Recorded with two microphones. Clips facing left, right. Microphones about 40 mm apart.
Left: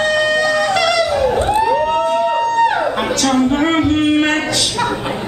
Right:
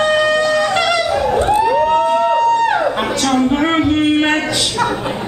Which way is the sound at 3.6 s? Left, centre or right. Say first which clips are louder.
Even; centre.